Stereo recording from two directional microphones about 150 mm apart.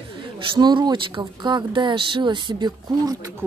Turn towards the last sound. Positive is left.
turn(degrees=-25)  # may be behind; listen again after turning